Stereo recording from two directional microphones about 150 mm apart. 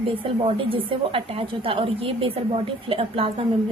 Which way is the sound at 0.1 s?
40° right (ahead or behind).